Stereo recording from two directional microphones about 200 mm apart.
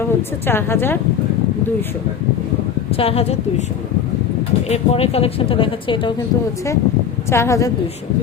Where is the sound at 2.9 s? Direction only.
30° left (ahead or behind).